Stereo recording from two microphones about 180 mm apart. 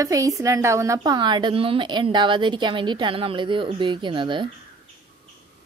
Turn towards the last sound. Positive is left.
turn(degrees=-25)  # may be behind; listen again after turning